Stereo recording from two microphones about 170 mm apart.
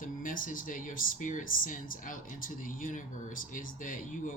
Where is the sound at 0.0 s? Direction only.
55° left (ahead or behind).